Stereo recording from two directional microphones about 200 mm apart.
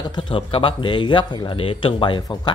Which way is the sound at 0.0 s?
25° left (ahead or behind).